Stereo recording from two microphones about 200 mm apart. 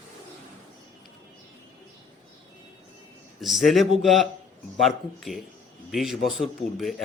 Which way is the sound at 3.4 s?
Centre (ahead or behind).